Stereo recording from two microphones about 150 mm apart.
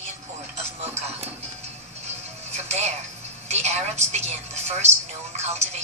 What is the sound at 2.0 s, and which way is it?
Music, 50° right (ahead or behind).